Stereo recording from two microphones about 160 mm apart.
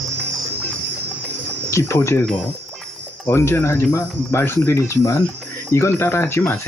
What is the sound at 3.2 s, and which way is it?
Speech, 15° left (ahead or behind).